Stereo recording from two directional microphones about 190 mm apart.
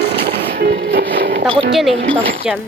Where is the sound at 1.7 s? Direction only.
Centre (ahead or behind).